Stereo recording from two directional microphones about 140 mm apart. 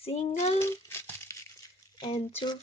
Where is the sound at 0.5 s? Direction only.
20° left (ahead or behind).